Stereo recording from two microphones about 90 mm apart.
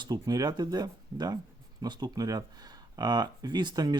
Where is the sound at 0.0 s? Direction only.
50° right (ahead or behind).